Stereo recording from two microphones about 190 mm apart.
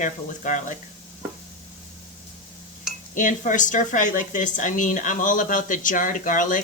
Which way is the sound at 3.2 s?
45° left (ahead or behind).